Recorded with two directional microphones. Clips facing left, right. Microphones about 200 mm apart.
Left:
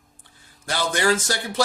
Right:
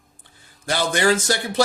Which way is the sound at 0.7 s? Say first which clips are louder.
Right 2 dB; 20° right (ahead or behind).